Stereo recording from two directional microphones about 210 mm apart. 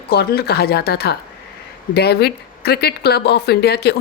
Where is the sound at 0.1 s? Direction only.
50° left (ahead or behind).